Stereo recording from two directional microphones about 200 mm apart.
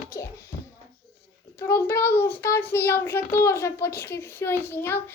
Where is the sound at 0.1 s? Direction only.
15° left (ahead or behind).